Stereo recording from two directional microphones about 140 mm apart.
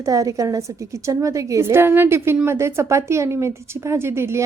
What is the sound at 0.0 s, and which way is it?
A woman's voice, 25° right (ahead or behind).